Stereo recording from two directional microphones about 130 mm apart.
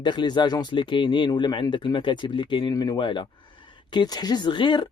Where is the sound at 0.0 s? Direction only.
35° left (ahead or behind).